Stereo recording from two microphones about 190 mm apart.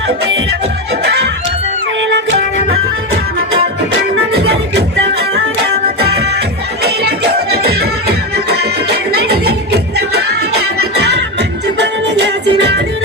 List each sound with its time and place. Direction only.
2.0 s music: 70° right (ahead or behind)
4.4 s music: 60° right (ahead or behind)
7.3 s music: 55° right (ahead or behind)
11.8 s music: 65° right (ahead or behind)